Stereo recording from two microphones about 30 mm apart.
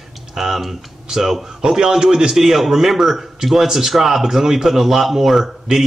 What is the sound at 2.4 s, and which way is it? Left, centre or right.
Speech, centre.